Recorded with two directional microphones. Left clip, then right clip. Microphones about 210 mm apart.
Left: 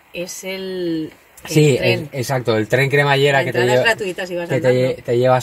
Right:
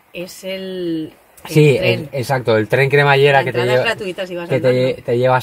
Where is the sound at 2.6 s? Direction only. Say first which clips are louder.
Right 1 dB; 20° right (ahead or behind).